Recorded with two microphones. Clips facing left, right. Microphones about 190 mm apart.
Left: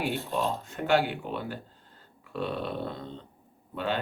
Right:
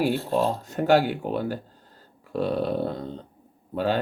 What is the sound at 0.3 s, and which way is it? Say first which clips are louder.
Speech: right 6 dB; 40° right (ahead or behind).